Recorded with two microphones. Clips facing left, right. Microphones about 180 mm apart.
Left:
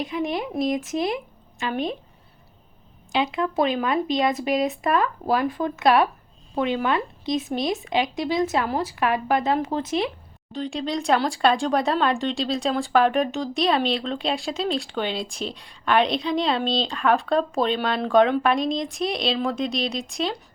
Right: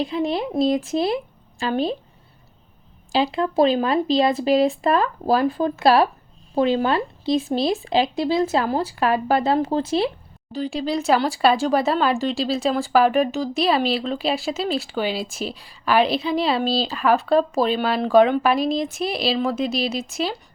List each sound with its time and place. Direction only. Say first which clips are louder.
0.0 s a woman's voice: right 3 dB; 30° right (ahead or behind)
3.1 s speech: right 3 dB; 30° right (ahead or behind)
10.5 s speech: right 3 dB; 5° right (ahead or behind)